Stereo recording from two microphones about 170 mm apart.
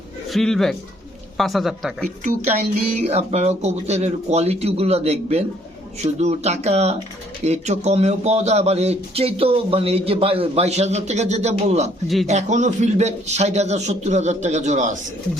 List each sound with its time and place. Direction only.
0.3 s speech: centre (ahead or behind)
3.0 s speech: 40° right (ahead or behind)
12.0 s speech: centre (ahead or behind)
12.3 s a man's voice: 45° right (ahead or behind)